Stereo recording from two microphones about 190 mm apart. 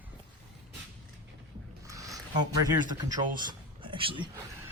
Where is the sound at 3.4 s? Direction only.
25° right (ahead or behind).